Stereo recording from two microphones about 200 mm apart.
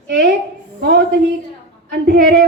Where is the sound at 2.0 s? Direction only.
50° right (ahead or behind).